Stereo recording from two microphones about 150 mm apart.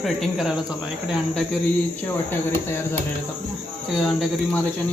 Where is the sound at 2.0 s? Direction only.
15° left (ahead or behind).